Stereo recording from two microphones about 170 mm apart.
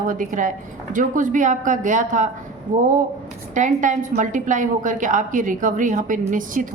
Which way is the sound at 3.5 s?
50° right (ahead or behind).